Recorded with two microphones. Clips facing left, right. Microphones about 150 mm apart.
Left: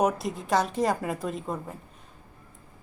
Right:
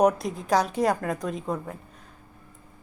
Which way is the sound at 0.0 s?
Centre (ahead or behind).